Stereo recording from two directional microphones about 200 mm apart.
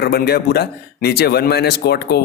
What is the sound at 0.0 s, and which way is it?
Speech, 50° left (ahead or behind).